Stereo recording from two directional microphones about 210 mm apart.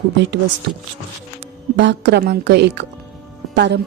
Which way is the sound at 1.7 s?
55° right (ahead or behind).